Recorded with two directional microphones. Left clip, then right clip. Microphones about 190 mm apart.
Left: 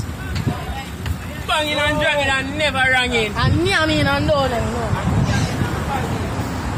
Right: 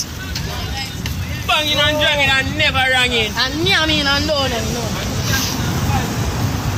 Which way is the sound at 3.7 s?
40° left (ahead or behind).